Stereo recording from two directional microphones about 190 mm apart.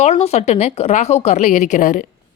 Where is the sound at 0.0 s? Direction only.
35° left (ahead or behind).